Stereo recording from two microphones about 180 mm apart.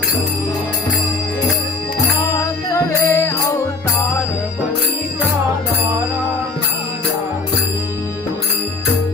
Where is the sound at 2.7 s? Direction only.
15° left (ahead or behind).